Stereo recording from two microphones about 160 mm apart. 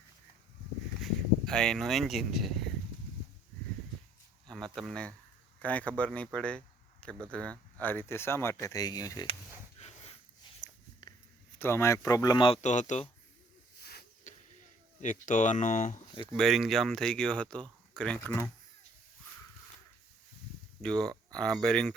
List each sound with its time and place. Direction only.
1.0 s speech: 5° left (ahead or behind)
4.4 s speech: 5° left (ahead or behind); by 9.2 s 25° left (ahead or behind)
9.7 s dog: 40° left (ahead or behind)
11.6 s speech: 15° left (ahead or behind)
12.6 s speech: 50° left (ahead or behind)
14.3 s arrow: 50° left (ahead or behind)
15.0 s speech: 55° left (ahead or behind)
16.3 s speech: centre (ahead or behind)
20.8 s speech: 5° left (ahead or behind)